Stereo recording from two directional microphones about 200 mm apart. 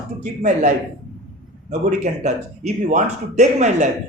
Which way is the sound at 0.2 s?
40° right (ahead or behind).